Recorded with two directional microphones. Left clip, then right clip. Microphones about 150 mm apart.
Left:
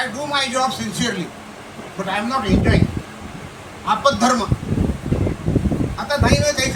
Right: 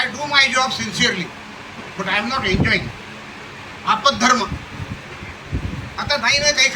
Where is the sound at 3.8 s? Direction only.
60° left (ahead or behind).